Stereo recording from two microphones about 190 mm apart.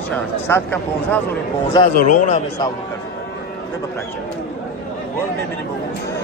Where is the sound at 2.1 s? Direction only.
35° left (ahead or behind).